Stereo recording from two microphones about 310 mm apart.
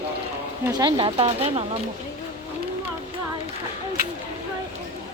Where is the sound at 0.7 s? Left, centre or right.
Centre.